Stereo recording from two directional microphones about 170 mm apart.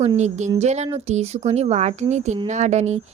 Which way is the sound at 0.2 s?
45° right (ahead or behind).